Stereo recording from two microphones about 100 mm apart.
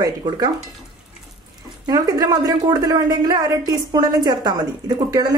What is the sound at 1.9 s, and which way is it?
A woman's voice, 40° right (ahead or behind).